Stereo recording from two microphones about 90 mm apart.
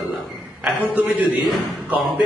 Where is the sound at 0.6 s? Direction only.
15° right (ahead or behind).